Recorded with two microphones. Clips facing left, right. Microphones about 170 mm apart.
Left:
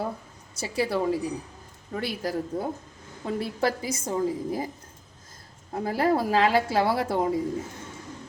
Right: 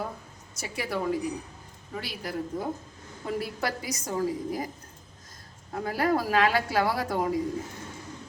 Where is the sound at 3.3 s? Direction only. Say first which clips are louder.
Left 5 dB; 25° left (ahead or behind).